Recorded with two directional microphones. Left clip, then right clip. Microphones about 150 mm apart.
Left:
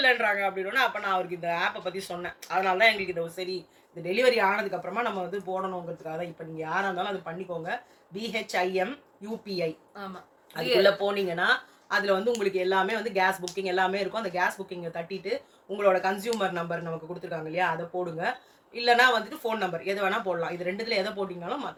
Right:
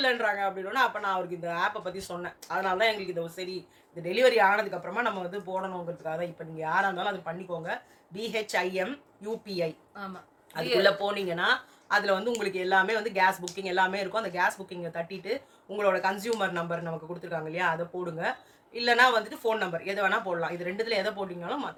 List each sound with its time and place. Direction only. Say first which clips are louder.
0.0 s speech: left 3 dB; 30° right (ahead or behind)
10.6 s speech: left 2 dB; 10° left (ahead or behind)
10.8 s speech: left 2 dB; 25° right (ahead or behind)